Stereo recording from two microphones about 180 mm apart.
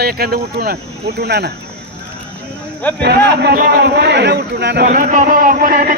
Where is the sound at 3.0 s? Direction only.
70° right (ahead or behind).